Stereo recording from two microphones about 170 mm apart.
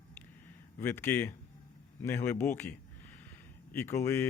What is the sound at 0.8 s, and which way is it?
A man's voice, 10° left (ahead or behind).